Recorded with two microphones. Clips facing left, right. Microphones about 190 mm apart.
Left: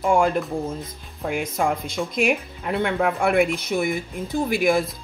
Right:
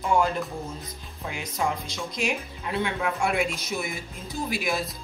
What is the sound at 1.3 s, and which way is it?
Speech, 55° left (ahead or behind).